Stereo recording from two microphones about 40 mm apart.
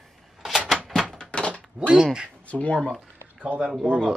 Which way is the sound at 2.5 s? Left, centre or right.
Left.